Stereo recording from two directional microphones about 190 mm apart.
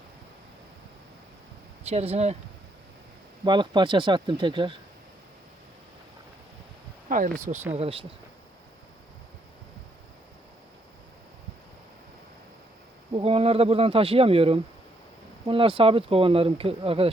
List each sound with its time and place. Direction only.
1.9 s speech: 35° right (ahead or behind)
3.4 s speech: 25° right (ahead or behind)
7.1 s speech: 45° right (ahead or behind)
7.7 s speech: 30° right (ahead or behind)
13.1 s speech: 30° right (ahead or behind)